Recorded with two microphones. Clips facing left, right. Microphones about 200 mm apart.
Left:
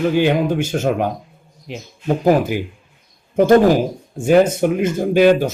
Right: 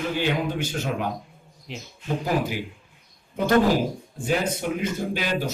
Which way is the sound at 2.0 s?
55° left (ahead or behind).